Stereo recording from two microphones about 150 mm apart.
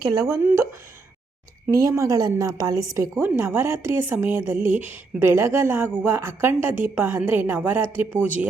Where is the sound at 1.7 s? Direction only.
20° right (ahead or behind).